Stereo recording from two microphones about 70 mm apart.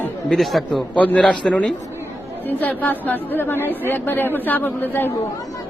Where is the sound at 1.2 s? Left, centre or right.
Centre.